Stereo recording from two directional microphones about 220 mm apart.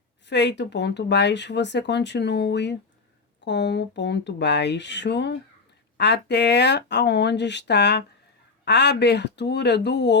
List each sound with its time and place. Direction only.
0.3 s speech: 50° left (ahead or behind)